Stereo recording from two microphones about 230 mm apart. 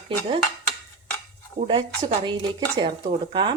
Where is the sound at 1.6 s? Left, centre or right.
Right.